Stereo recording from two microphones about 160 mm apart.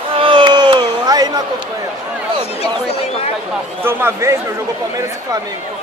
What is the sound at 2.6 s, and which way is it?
Speech, 40° left (ahead or behind).